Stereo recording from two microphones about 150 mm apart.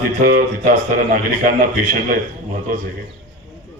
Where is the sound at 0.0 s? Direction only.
70° right (ahead or behind).